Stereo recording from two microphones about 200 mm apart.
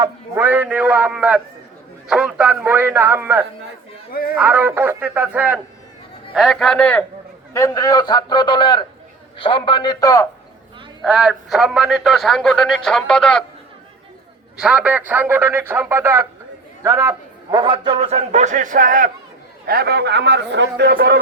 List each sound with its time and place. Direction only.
0.0 s a man's voice: 10° right (ahead or behind)
4.1 s speech: 50° left (ahead or behind)
4.4 s a man's voice: 10° right (ahead or behind); by 7.0 s 5° left (ahead or behind)
7.5 s a man's voice: 15° left (ahead or behind)
11.0 s a man's voice: centre (ahead or behind)
14.5 s a man's voice: 5° right (ahead or behind); by 21.2 s 50° right (ahead or behind)